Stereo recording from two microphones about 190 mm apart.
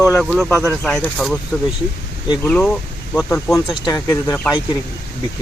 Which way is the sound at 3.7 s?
20° left (ahead or behind).